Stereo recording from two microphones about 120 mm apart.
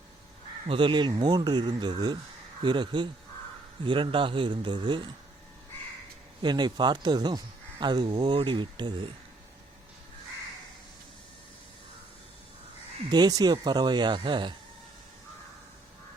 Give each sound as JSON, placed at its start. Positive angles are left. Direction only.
{"t": 0.7, "sound": "a man's voice", "side_deg": -45}
{"t": 6.4, "sound": "speech", "side_deg": -40}
{"t": 13.1, "sound": "speech", "side_deg": -35}